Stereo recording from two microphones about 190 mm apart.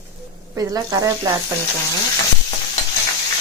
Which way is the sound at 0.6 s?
20° right (ahead or behind).